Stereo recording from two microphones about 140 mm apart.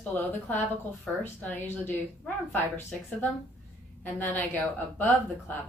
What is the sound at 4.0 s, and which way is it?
Speech, 15° left (ahead or behind).